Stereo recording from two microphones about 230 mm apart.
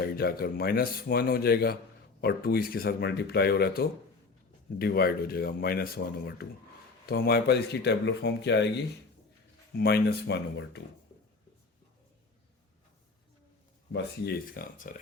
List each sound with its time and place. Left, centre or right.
0.0 s speech: left
9.7 s speech: left
13.9 s speech: left